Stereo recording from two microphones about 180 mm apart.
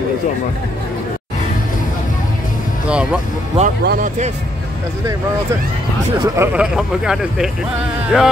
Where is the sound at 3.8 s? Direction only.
60° right (ahead or behind).